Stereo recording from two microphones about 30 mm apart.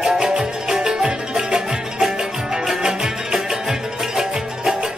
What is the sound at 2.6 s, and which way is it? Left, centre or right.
Music, centre.